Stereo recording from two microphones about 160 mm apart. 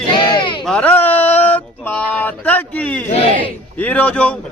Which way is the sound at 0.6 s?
5° left (ahead or behind).